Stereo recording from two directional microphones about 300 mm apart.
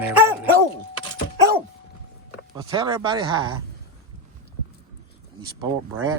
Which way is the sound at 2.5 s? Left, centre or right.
Centre.